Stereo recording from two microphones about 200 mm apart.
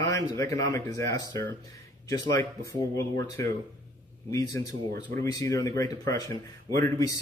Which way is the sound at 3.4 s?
15° left (ahead or behind).